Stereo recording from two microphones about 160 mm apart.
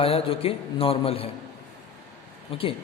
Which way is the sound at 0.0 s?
35° left (ahead or behind).